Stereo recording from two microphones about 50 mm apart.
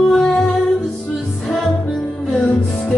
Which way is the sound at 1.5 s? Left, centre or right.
Centre.